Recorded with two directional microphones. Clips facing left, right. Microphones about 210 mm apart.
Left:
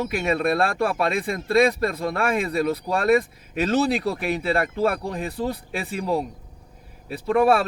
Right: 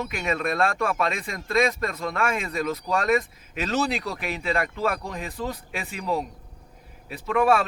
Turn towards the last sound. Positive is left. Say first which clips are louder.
# left 3 dB
turn(degrees=35)  # may be behind; listen again after turning